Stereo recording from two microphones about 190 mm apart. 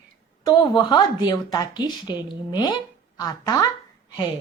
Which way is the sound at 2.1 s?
10° right (ahead or behind).